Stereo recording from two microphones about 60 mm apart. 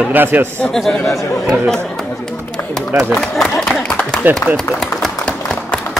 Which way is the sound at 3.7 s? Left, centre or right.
Centre.